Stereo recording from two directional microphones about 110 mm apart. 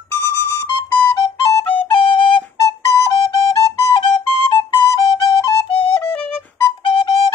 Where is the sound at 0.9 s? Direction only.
40° left (ahead or behind).